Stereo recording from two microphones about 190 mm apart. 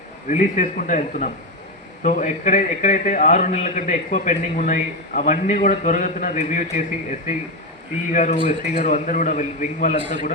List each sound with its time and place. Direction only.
0.3 s a man's voice: 40° left (ahead or behind)
8.1 s a man's voice: 40° left (ahead or behind)